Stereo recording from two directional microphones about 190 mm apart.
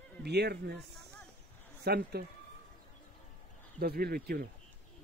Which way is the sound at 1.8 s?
55° right (ahead or behind).